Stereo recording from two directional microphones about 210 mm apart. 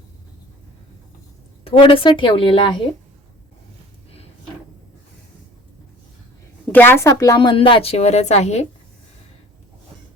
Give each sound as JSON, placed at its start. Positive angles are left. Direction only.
{"t": 1.6, "sound": "a woman's voice", "side_deg": 25}
{"t": 6.7, "sound": "a woman's voice", "side_deg": 10}